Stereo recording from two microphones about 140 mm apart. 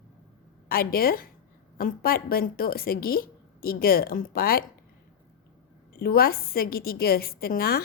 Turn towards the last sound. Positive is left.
turn(degrees=90)